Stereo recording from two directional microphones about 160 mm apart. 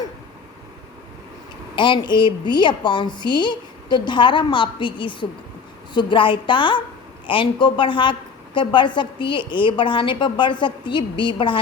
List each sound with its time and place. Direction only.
1.7 s a woman's voice: 30° left (ahead or behind)